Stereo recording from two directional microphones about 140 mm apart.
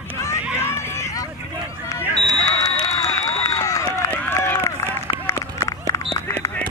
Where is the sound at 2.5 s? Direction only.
25° left (ahead or behind).